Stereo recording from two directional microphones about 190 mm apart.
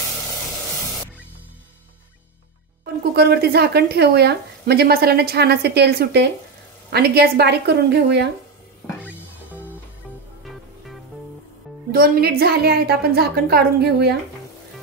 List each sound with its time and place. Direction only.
2.8 s speech: 55° right (ahead or behind)
11.9 s speech: 50° right (ahead or behind)